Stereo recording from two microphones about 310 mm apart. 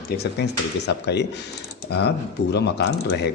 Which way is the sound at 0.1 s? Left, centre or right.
Left.